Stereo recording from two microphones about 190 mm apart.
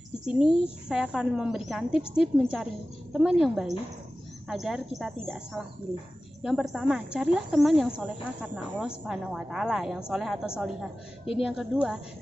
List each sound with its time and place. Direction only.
0.8 s speech: 5° right (ahead or behind)
6.4 s speech: centre (ahead or behind)